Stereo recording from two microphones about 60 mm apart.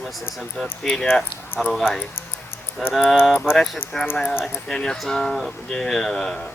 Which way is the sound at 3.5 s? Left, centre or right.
Centre.